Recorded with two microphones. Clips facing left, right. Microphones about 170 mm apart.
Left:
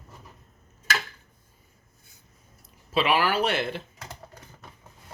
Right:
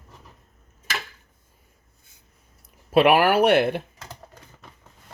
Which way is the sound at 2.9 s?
55° right (ahead or behind).